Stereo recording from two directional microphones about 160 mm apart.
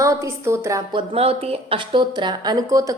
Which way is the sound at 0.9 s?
40° right (ahead or behind).